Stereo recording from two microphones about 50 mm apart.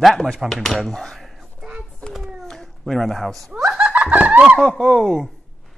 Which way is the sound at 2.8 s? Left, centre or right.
Centre.